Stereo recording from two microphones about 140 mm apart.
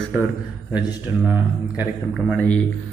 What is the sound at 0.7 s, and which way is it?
A man's voice, 10° right (ahead or behind).